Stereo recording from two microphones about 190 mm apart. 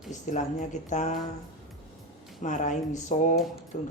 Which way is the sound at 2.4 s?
40° left (ahead or behind).